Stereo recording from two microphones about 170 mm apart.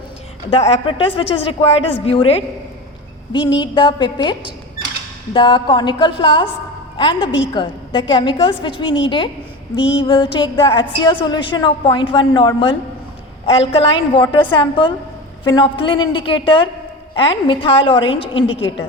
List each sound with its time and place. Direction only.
0.7 s a woman's voice: 30° left (ahead or behind)